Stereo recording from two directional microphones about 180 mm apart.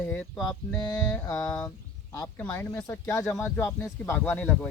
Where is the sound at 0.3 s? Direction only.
20° left (ahead or behind).